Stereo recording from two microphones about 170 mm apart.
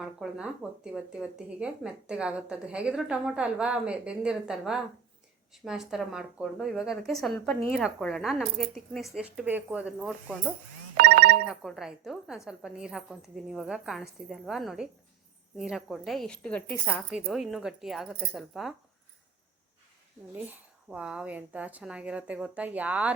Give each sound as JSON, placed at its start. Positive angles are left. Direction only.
{"t": 0.0, "sound": "a woman's voice", "side_deg": -5}
{"t": 10.9, "sound": "speech", "side_deg": -65}
{"t": 11.4, "sound": "a woman's voice", "side_deg": 0}
{"t": 17.1, "sound": "a woman's voice", "side_deg": -5}
{"t": 20.3, "sound": "a woman's voice", "side_deg": -10}